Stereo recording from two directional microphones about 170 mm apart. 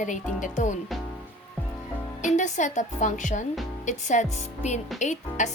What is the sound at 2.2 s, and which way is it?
A woman's voice, 45° left (ahead or behind).